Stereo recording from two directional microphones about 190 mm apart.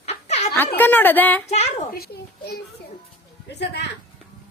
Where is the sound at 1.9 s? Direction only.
55° left (ahead or behind).